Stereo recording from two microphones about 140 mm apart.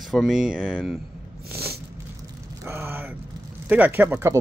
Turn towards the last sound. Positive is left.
turn(degrees=-15)  # may be behind; listen again after turning